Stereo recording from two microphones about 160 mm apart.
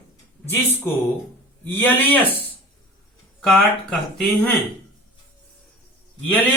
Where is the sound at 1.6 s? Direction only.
10° left (ahead or behind).